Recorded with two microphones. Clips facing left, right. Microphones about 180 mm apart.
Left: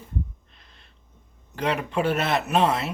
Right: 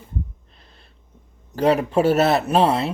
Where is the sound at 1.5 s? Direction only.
35° right (ahead or behind).